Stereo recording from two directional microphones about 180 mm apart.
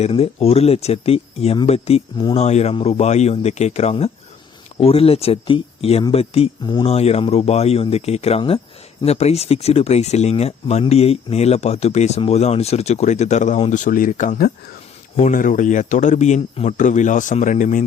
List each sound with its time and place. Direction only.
0.0 s speech: 30° left (ahead or behind)